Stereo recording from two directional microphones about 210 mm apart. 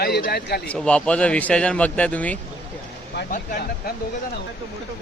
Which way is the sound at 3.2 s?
45° left (ahead or behind).